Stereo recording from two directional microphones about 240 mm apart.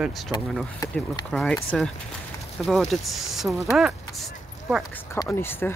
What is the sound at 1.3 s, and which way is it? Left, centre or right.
Speech, centre.